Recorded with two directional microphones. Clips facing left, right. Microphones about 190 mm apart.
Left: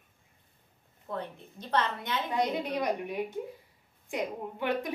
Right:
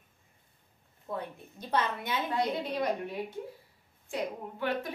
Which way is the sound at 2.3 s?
15° left (ahead or behind).